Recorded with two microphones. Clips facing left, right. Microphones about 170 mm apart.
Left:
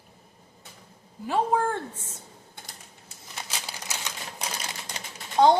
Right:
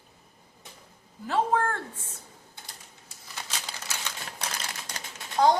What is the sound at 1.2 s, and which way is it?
Speech, 10° left (ahead or behind).